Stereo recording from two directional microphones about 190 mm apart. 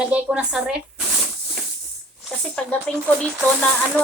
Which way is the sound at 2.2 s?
5° left (ahead or behind).